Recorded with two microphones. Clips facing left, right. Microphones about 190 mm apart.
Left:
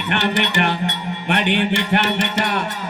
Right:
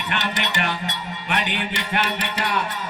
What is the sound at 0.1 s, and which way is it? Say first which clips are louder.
Music: left 7 dB; 60° left (ahead or behind).